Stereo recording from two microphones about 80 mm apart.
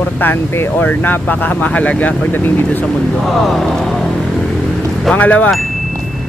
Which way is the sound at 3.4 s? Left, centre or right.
Centre.